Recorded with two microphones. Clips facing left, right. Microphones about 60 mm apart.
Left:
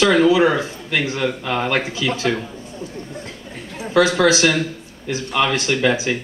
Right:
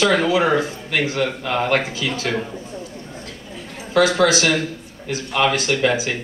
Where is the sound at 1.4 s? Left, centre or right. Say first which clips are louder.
Even; centre.